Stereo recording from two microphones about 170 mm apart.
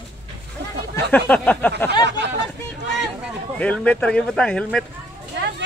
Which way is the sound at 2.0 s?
90° right.